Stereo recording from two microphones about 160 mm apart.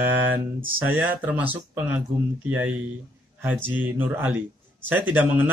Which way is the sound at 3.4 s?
10° right (ahead or behind).